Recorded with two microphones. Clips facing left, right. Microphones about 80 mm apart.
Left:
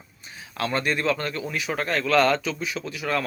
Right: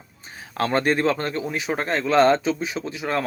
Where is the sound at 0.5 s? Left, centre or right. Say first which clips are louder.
Right 5 dB; right.